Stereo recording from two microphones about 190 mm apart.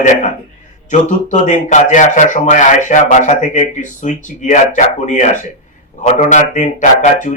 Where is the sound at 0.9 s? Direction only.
40° left (ahead or behind).